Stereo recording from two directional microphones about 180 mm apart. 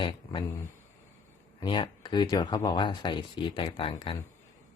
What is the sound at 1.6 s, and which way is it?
Speech, 25° left (ahead or behind).